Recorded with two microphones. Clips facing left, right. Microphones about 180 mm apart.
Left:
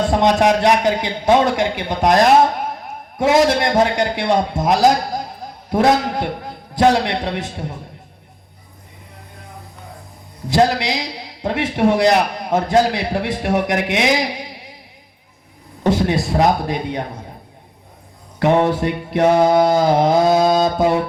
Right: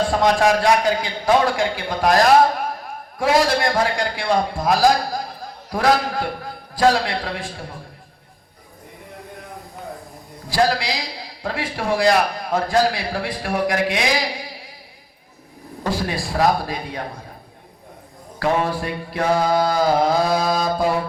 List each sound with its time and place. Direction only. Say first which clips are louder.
0.0 s a man's voice: left 2 dB; 20° left (ahead or behind)
10.5 s a man's voice: left 4 dB; 20° left (ahead or behind)
15.8 s a man's voice: left 7 dB; 20° left (ahead or behind)
18.3 s a man's voice: left 5 dB; 20° left (ahead or behind)